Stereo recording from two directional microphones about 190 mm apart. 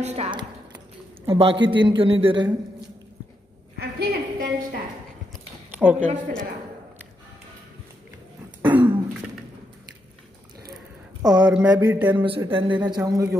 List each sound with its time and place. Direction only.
0.0 s a man's voice: 35° right (ahead or behind)
3.7 s a sound: 55° right (ahead or behind)
5.8 s a woman's voice: 10° right (ahead or behind)
8.7 s cough: 10° right (ahead or behind)
11.4 s a woman's voice: 5° right (ahead or behind)
11.7 s a man's voice: 20° right (ahead or behind)